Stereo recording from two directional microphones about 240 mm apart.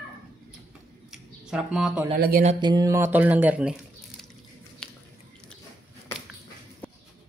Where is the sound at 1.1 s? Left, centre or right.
Centre.